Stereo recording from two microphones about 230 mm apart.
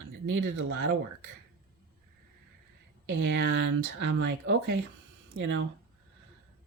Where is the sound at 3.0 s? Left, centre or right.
Right.